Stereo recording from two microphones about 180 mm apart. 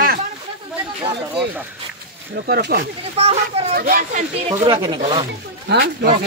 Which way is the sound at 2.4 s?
60° right (ahead or behind).